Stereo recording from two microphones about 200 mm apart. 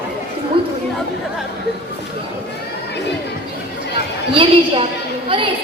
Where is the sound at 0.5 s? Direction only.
25° right (ahead or behind).